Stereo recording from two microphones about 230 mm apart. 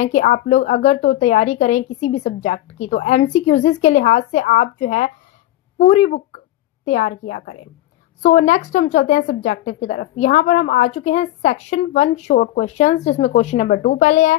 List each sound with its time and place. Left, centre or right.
0.0 s a woman's voice: left